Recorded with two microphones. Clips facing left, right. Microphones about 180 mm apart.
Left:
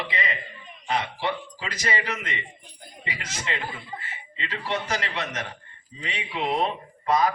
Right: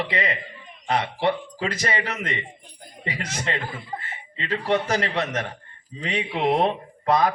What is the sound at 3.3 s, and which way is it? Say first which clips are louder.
Speech: right 2 dB; 60° right (ahead or behind).